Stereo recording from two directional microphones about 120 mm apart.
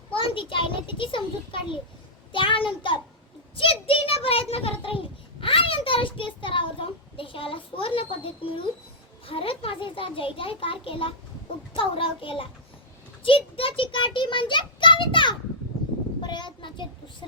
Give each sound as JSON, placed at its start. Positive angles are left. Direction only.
{"t": 0.1, "sound": "a sound", "side_deg": 45}
{"t": 2.3, "sound": "a child's voice", "side_deg": 45}
{"t": 16.2, "sound": "child singing", "side_deg": 40}